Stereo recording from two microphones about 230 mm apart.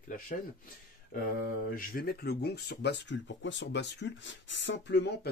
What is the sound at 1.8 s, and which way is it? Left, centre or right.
Speech, left.